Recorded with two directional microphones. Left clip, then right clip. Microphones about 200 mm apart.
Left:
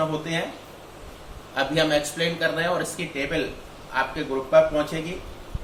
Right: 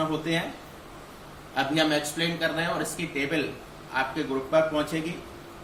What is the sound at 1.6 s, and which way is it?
A man's voice, 25° left (ahead or behind).